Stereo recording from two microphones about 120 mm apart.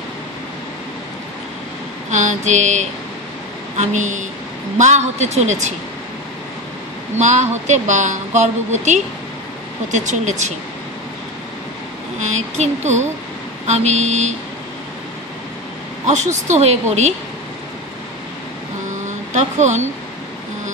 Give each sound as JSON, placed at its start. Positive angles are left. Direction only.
{"t": 2.0, "sound": "a woman's voice", "side_deg": -90}
{"t": 4.7, "sound": "a woman's voice", "side_deg": -75}
{"t": 7.2, "sound": "a woman's voice", "side_deg": -80}
{"t": 9.8, "sound": "speech", "side_deg": -90}
{"t": 12.2, "sound": "a woman's voice", "side_deg": -70}
{"t": 16.1, "sound": "a woman's voice", "side_deg": -80}
{"t": 19.0, "sound": "vehicle", "side_deg": -80}